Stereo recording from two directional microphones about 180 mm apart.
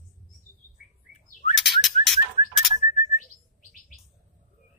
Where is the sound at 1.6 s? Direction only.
Centre (ahead or behind).